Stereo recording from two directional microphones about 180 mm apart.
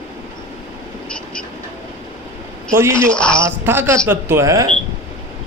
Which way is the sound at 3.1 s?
5° left (ahead or behind).